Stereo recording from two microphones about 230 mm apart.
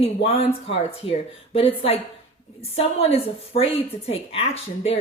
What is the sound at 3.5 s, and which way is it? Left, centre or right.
Speech, left.